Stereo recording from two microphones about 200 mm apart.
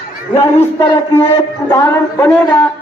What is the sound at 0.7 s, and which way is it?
A man's voice, 15° left (ahead or behind).